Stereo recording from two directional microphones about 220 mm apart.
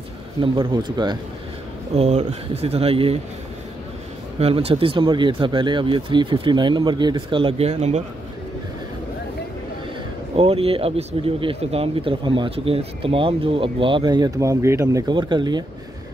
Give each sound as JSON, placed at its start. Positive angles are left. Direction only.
{"t": 0.4, "sound": "speech", "side_deg": -20}
{"t": 4.4, "sound": "speech", "side_deg": -25}
{"t": 10.3, "sound": "speech", "side_deg": -25}